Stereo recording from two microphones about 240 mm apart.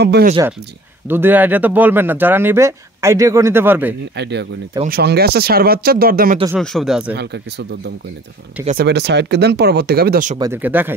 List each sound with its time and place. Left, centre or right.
0.0 s speech: right
1.0 s speech: centre
4.2 s speech: right
6.6 s speech: centre
8.6 s speech: right
10.4 s speech: centre